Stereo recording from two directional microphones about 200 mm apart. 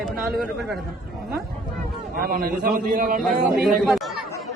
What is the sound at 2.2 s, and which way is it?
Speech, 45° right (ahead or behind).